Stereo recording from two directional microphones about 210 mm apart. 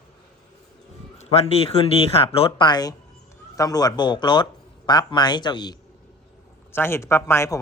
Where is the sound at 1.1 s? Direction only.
30° left (ahead or behind).